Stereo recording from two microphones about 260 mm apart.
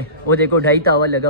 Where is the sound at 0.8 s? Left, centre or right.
Right.